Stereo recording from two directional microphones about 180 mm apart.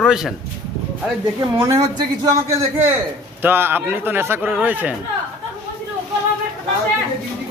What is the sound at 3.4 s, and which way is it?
A man's voice, 10° right (ahead or behind).